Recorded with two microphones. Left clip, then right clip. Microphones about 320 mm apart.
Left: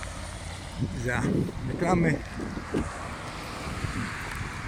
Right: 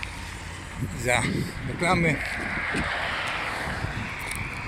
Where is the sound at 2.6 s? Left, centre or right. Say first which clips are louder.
Right 5 dB; right.